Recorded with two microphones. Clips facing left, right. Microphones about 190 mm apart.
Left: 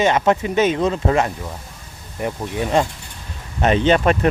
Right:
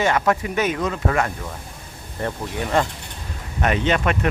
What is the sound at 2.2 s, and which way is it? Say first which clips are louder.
Speech: left 2 dB; 15° left (ahead or behind).